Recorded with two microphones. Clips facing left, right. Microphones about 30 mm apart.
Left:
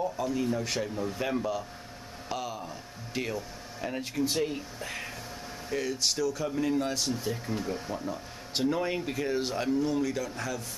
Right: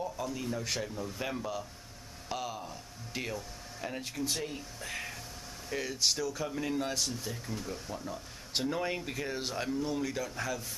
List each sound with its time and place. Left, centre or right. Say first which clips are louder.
0.0 s speech: left 6 dB; centre
0.9 s speech: left 6 dB; left
1.2 s speech: left 5 dB; centre
7.1 s speech: left 7 dB; centre
8.5 s speech: left 4 dB; centre